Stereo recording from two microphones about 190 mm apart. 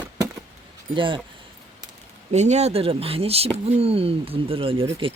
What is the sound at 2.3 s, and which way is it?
Speech, 35° right (ahead or behind).